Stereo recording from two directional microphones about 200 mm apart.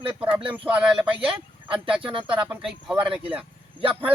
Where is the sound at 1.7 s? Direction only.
25° right (ahead or behind).